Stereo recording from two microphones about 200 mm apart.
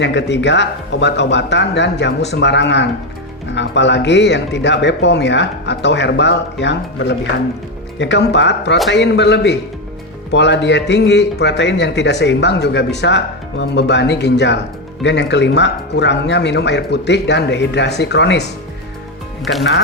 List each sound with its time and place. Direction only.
0.0 s speech: 60° left (ahead or behind)
19.5 s speech: 60° left (ahead or behind)